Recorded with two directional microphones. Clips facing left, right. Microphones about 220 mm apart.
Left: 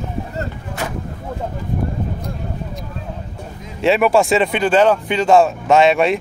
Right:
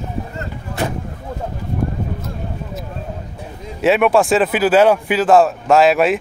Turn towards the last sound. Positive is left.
turn(degrees=0)  # may be behind; listen again after turning